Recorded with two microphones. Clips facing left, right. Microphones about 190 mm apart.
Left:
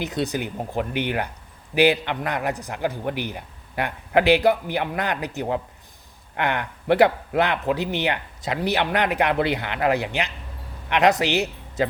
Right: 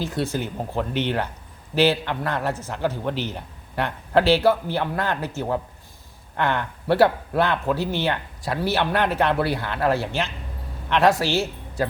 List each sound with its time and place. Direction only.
0.0 s speech: 20° left (ahead or behind)